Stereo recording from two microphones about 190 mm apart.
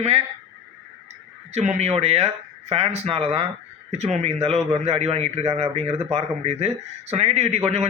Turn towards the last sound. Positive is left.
turn(degrees=-35)  # may be behind; listen again after turning